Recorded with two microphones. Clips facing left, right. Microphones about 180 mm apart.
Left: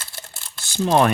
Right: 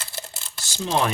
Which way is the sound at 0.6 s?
55° left (ahead or behind).